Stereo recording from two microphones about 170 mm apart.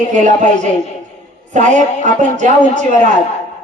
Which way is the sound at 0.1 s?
45° right (ahead or behind).